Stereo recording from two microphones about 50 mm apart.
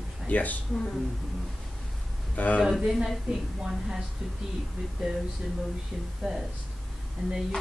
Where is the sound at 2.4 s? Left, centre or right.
Left.